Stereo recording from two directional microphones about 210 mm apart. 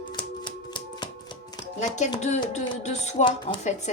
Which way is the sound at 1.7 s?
35° left (ahead or behind).